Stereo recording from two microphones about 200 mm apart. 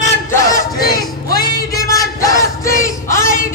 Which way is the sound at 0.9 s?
20° left (ahead or behind).